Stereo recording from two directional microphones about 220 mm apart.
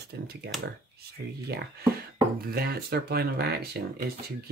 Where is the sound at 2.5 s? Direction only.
45° right (ahead or behind).